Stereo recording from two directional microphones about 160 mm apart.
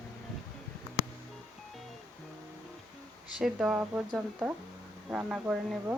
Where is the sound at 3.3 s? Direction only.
5° right (ahead or behind).